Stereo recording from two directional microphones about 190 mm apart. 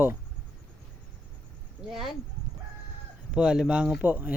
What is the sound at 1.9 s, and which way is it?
Speech, centre (ahead or behind).